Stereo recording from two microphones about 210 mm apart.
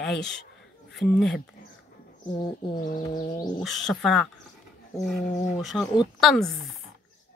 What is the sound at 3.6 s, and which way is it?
Speech, centre (ahead or behind).